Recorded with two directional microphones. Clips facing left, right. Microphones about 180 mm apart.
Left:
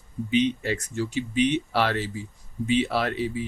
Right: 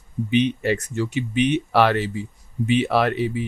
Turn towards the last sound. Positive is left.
turn(degrees=-65)  # may be behind; listen again after turning